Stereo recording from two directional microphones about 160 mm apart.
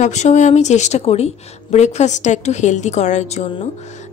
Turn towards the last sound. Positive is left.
turn(degrees=45)  # may be behind; listen again after turning